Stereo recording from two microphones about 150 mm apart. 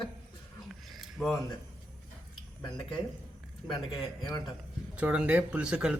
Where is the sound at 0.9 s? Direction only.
Centre (ahead or behind).